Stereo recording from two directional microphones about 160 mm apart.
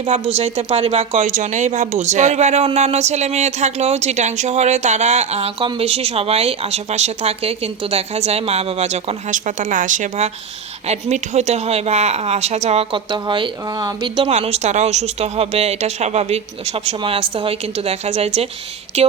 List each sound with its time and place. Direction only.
0.0 s speech: 40° right (ahead or behind)
14.2 s speech: 40° right (ahead or behind)